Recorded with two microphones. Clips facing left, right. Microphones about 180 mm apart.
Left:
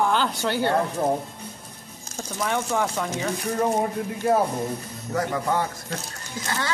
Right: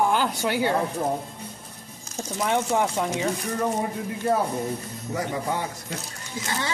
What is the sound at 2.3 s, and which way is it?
Speech, 20° right (ahead or behind).